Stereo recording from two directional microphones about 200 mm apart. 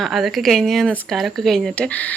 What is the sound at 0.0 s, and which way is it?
Speech, centre (ahead or behind).